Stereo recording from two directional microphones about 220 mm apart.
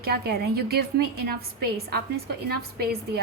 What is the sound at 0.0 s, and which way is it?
A woman's voice, 45° right (ahead or behind).